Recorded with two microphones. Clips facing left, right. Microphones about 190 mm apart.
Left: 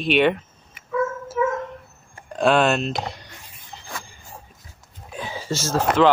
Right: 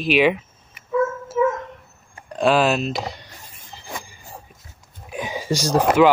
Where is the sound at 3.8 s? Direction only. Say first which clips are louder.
Right 3 dB; 15° right (ahead or behind).